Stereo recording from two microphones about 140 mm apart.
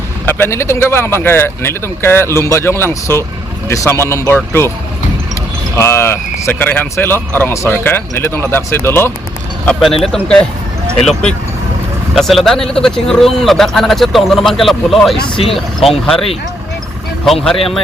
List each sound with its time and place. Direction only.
0.3 s speech: 15° left (ahead or behind)
5.7 s speech: 20° left (ahead or behind)
9.6 s speech: 5° left (ahead or behind)
16.1 s speech: 40° left (ahead or behind)